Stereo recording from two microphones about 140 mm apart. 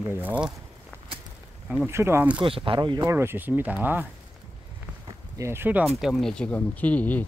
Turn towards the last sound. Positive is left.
turn(degrees=10)  # may be behind; listen again after turning